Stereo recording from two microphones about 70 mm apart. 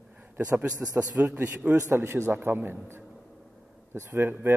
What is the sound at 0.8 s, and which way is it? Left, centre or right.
Speech, right.